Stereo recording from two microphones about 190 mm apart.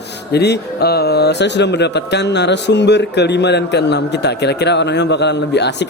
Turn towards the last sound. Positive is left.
turn(degrees=65)  # may be behind; listen again after turning